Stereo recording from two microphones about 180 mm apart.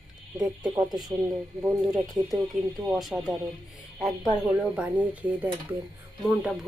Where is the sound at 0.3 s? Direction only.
20° right (ahead or behind).